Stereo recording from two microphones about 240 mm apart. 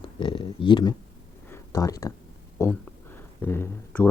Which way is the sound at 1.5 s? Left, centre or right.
Centre.